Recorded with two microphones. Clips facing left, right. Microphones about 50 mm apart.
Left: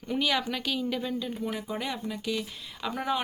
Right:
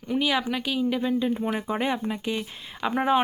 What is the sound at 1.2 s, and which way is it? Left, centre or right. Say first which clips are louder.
Speech: right 7 dB; right.